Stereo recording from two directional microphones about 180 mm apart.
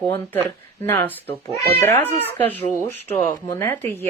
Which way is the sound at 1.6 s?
15° left (ahead or behind).